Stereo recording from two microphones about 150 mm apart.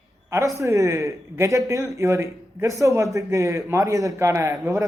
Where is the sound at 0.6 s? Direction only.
20° right (ahead or behind).